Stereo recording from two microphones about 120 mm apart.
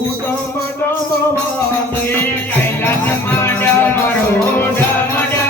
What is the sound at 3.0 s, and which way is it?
Music, 15° left (ahead or behind).